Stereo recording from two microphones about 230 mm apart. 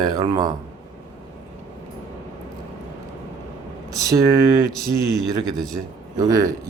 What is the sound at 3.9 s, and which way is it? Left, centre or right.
Speech, centre.